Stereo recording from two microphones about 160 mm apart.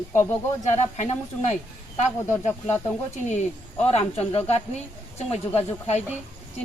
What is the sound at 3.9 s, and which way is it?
Speech, 40° left (ahead or behind).